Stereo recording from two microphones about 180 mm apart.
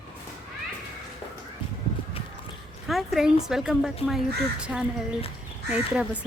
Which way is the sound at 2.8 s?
Centre (ahead or behind).